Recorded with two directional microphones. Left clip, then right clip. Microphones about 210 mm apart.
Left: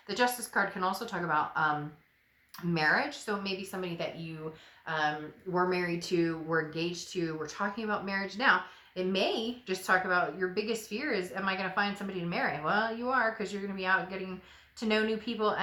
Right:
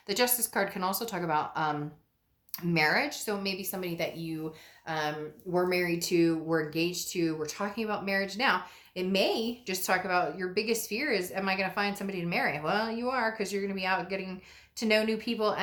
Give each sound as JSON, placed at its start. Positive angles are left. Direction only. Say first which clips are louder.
{"t": 0.1, "sound": "a woman's voice", "louder": "right 1 dB", "side_deg": -50}
{"t": 2.7, "sound": "a woman's voice", "louder": "right 1 dB", "side_deg": -45}